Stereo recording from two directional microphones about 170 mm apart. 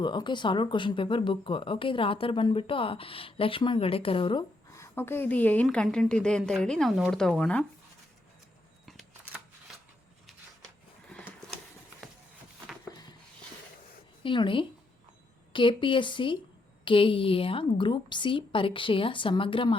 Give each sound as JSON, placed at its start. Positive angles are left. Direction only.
{"t": 0.0, "sound": "speech", "side_deg": 25}
{"t": 4.7, "sound": "a woman's voice", "side_deg": 15}
{"t": 8.9, "sound": "a sound", "side_deg": 0}
{"t": 12.9, "sound": "rub", "side_deg": 25}
{"t": 14.3, "sound": "a woman's voice", "side_deg": 30}